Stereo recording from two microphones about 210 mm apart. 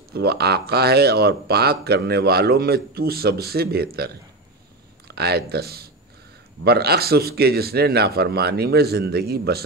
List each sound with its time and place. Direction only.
0.1 s speech: 50° right (ahead or behind)